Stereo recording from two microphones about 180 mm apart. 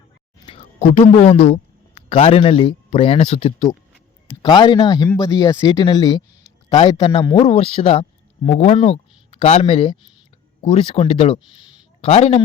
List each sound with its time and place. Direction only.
1.3 s speech: 35° left (ahead or behind)